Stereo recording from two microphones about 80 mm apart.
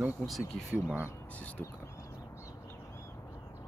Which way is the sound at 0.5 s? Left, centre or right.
Centre.